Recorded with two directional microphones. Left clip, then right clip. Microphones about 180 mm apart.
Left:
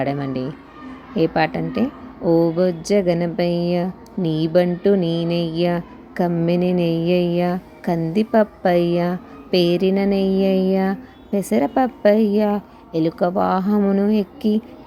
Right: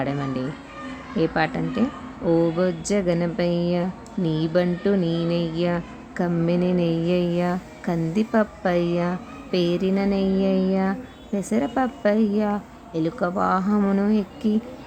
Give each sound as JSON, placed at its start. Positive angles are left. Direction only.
{"t": 0.0, "sound": "speech", "side_deg": 20}